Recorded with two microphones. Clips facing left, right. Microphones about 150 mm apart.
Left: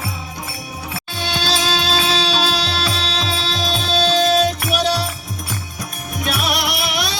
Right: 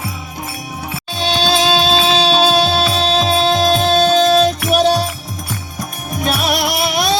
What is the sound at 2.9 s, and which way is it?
Music, 50° right (ahead or behind).